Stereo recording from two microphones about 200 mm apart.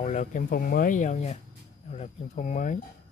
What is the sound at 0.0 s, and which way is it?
Speech, 35° left (ahead or behind).